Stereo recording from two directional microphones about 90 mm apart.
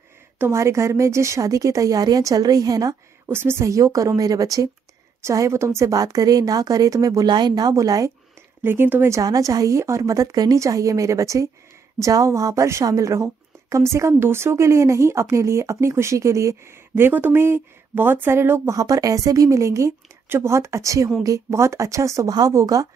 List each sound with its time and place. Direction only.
0.4 s a woman's voice: 30° right (ahead or behind)
3.3 s a woman's voice: 25° right (ahead or behind)
8.6 s a woman's voice: 25° right (ahead or behind)
9.1 s a woman's voice: 40° right (ahead or behind)
18.8 s a woman's voice: 40° right (ahead or behind)